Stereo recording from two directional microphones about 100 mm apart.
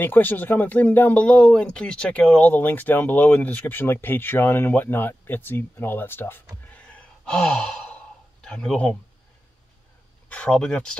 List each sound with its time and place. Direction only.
0.0 s speech: 20° left (ahead or behind)
6.7 s sigh: 10° left (ahead or behind)
8.5 s speech: 10° left (ahead or behind)
10.3 s speech: 10° left (ahead or behind)